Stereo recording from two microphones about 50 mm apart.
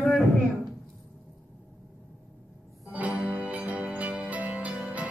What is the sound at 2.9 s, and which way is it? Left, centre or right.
Music, right.